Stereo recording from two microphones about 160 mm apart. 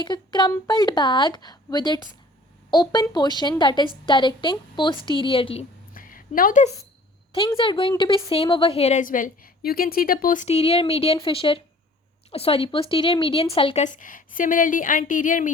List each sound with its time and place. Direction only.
0.0 s a woman's voice: 30° left (ahead or behind)
5.9 s a sound: 60° left (ahead or behind)
7.3 s a woman's voice: 30° left (ahead or behind)
13.8 s a woman's voice: 55° left (ahead or behind)